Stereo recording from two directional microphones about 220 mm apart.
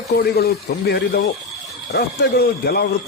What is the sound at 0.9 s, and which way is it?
A man's voice, 45° left (ahead or behind).